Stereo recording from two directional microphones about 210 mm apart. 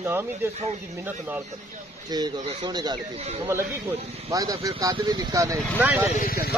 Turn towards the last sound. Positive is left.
turn(degrees=45)  # may be behind; listen again after turning